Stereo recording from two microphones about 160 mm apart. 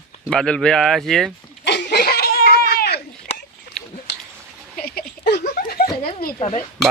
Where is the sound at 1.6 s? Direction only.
90° left.